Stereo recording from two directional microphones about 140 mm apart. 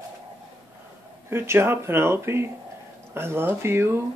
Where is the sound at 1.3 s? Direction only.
15° right (ahead or behind).